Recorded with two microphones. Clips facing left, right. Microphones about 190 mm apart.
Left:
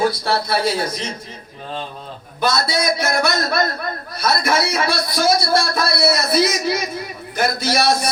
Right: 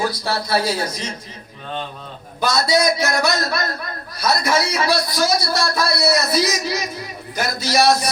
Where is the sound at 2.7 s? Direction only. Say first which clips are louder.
Right 2 dB; 55° left (ahead or behind).